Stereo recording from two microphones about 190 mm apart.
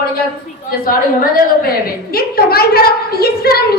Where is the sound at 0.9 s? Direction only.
50° left (ahead or behind).